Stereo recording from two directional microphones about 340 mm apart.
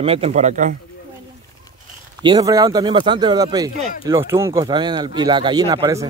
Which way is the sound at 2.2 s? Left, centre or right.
Centre.